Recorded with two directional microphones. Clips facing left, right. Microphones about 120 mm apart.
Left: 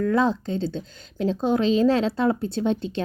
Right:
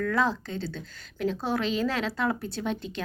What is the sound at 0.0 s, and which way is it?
A woman's voice, 25° left (ahead or behind).